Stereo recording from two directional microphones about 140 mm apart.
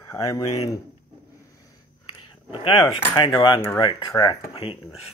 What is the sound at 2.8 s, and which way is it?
Speech, 30° left (ahead or behind).